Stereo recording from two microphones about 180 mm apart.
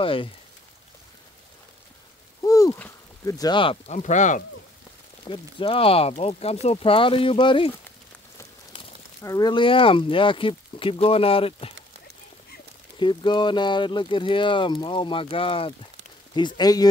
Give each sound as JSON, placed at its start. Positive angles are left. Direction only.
{"t": 0.0, "sound": "speech", "side_deg": 30}
{"t": 2.4, "sound": "speech", "side_deg": 20}
{"t": 5.2, "sound": "speech", "side_deg": 30}
{"t": 9.2, "sound": "speech", "side_deg": 20}
{"t": 13.0, "sound": "speech", "side_deg": 25}